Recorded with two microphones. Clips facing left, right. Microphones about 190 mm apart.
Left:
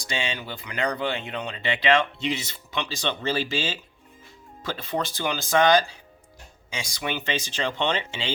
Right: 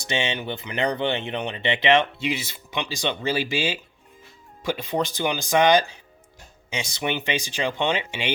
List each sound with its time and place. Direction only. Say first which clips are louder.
0.0 s speech: right 4 dB; 25° right (ahead or behind)
2.1 s speech: right 1 dB; 10° right (ahead or behind)